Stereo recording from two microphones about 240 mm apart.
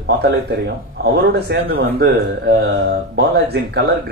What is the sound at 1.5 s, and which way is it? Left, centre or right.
A man's voice, right.